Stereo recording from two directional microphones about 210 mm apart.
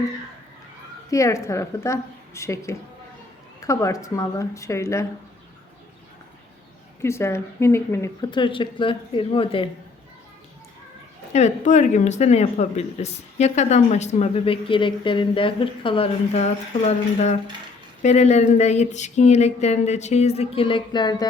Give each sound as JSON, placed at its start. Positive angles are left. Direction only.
{"t": 1.1, "sound": "a woman's voice", "side_deg": 15}
{"t": 7.0, "sound": "speech", "side_deg": 10}
{"t": 11.3, "sound": "speech", "side_deg": 35}